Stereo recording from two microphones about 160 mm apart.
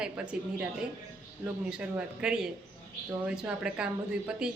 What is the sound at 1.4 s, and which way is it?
A woman's voice, 5° right (ahead or behind).